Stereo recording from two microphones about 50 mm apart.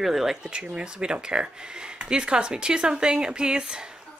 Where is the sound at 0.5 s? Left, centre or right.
Right.